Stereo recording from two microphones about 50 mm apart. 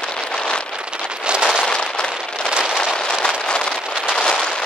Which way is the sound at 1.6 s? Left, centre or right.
Centre.